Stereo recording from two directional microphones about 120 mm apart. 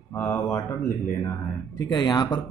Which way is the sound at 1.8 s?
30° left (ahead or behind).